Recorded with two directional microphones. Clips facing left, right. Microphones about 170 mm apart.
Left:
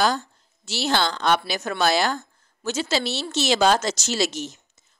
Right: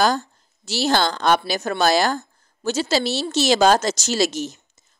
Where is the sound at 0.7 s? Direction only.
40° right (ahead or behind).